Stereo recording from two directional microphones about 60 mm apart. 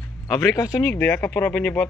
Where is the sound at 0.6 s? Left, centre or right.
Left.